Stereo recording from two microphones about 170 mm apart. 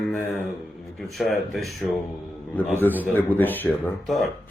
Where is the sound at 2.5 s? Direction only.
10° left (ahead or behind).